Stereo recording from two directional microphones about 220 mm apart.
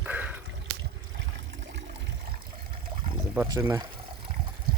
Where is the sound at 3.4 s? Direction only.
15° right (ahead or behind).